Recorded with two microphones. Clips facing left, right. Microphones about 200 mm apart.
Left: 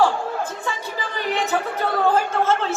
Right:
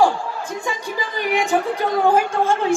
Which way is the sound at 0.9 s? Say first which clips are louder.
Right 4 dB; 15° right (ahead or behind).